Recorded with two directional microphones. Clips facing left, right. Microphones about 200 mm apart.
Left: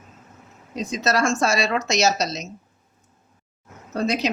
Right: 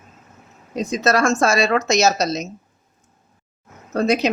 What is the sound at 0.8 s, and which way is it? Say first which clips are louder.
Speech: right 4 dB; 50° right (ahead or behind).